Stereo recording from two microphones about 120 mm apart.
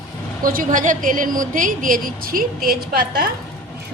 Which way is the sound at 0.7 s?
90° right.